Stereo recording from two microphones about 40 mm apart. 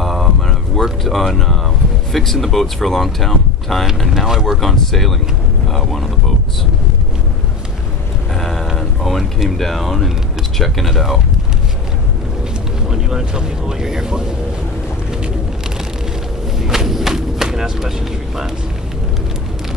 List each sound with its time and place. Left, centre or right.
0.0 s a sound: centre
0.8 s speech: centre
4.1 s speech: centre
8.4 s a sound: centre
8.7 s speech: centre
12.8 s speech: centre
16.5 s vehicle: centre